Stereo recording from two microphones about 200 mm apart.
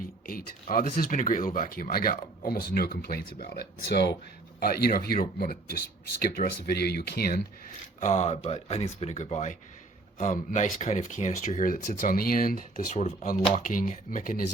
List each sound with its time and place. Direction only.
0.3 s speech: 45° left (ahead or behind)
8.0 s speech: 35° left (ahead or behind)